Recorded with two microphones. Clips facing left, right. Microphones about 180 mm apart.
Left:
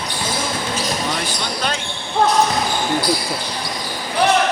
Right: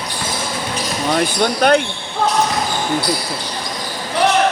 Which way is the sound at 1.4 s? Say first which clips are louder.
Right 10 dB; 60° right (ahead or behind).